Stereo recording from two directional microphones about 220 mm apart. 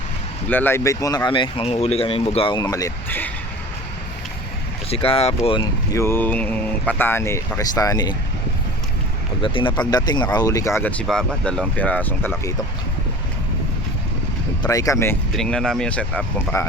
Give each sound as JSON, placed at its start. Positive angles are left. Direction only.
{"t": 0.4, "sound": "speech", "side_deg": 10}
{"t": 4.9, "sound": "speech", "side_deg": 25}
{"t": 9.4, "sound": "speech", "side_deg": 25}
{"t": 14.6, "sound": "speech", "side_deg": 15}
{"t": 15.3, "sound": "speech", "side_deg": 5}